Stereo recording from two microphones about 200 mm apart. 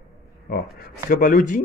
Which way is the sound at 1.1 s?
45° left (ahead or behind).